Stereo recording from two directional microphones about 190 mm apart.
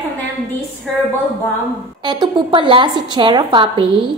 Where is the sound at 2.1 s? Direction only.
25° right (ahead or behind).